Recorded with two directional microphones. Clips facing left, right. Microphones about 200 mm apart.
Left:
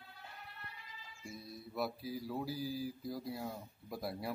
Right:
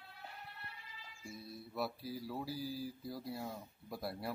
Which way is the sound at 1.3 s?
Centre (ahead or behind).